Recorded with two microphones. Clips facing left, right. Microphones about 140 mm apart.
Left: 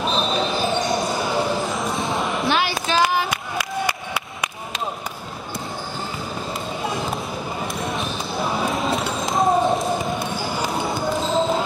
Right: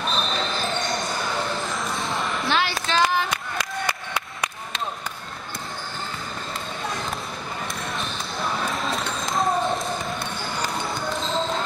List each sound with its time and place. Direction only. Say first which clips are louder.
0.0 s basketball bounce: left 5 dB; 15° left (ahead or behind)
1.8 s basketball bounce: left 4 dB; centre (ahead or behind)
2.5 s a sound: even; 10° left (ahead or behind)
6.8 s basketball bounce: left 4 dB; 5° left (ahead or behind)
9.4 s basketball bounce: left 5 dB; 25° left (ahead or behind)
9.8 s basketball bounce: left 5 dB; 5° left (ahead or behind)